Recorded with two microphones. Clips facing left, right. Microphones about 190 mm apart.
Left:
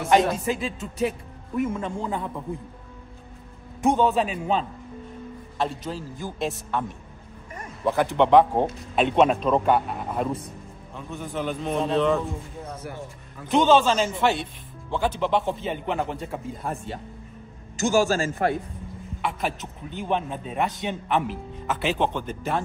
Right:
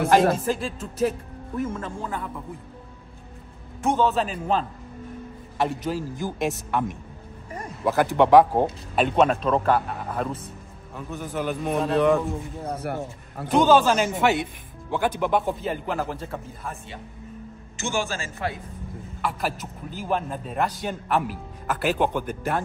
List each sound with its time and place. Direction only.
0.4 s a man's voice: centre (ahead or behind)
1.7 s a man's voice: 15° left (ahead or behind)
4.0 s a man's voice: centre (ahead or behind); by 6.8 s 15° right (ahead or behind)
7.8 s a man's voice: 5° right (ahead or behind)
12.8 s speech: 65° right (ahead or behind)
13.5 s a man's voice: 5° right (ahead or behind)
16.6 s a man's voice: 45° left (ahead or behind)
19.2 s a man's voice: 5° right (ahead or behind)